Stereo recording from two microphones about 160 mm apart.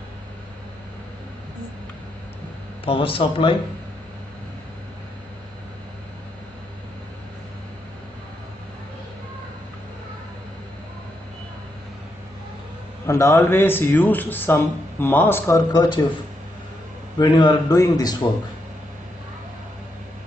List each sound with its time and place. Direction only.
2.8 s a man's voice: 35° left (ahead or behind)
13.0 s speech: 15° left (ahead or behind)
15.7 s a man's voice: 30° left (ahead or behind)
17.2 s a man's voice: 30° left (ahead or behind)